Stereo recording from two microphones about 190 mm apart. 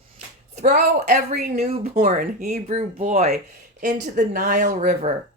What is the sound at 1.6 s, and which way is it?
Speech, 35° right (ahead or behind).